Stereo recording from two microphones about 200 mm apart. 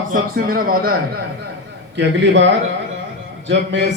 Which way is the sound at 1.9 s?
60° right (ahead or behind).